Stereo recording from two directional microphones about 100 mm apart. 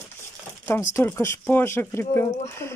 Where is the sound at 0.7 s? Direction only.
25° left (ahead or behind).